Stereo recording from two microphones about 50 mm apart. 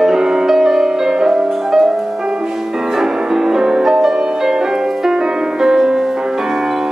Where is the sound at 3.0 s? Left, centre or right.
Centre.